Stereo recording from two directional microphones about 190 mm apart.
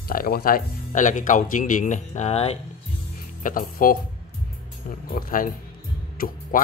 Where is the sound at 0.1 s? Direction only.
50° left (ahead or behind); by 2.6 s 35° left (ahead or behind).